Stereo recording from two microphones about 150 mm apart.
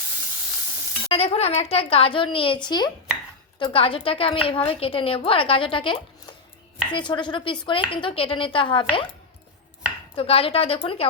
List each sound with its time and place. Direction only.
1.1 s a woman's voice: 40° left (ahead or behind)
10.2 s a woman's voice: 40° left (ahead or behind)